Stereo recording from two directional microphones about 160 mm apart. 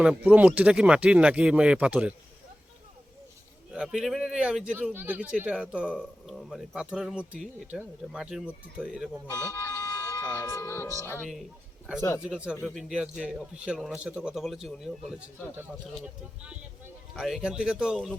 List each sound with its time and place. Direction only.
0.0 s speech: 10° right (ahead or behind)
3.7 s speech: 5° right (ahead or behind)
9.5 s speech: 15° left (ahead or behind)
12.2 s speech: 5° right (ahead or behind)